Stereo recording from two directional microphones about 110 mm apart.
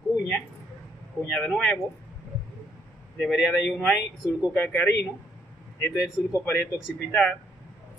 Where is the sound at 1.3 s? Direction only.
5° left (ahead or behind).